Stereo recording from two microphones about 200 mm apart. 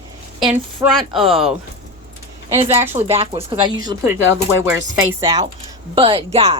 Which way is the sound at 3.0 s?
30° right (ahead or behind).